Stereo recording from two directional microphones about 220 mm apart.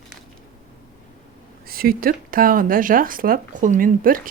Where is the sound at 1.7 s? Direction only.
40° right (ahead or behind).